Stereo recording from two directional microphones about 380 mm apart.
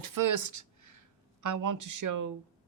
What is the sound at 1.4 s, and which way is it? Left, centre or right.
Speech, right.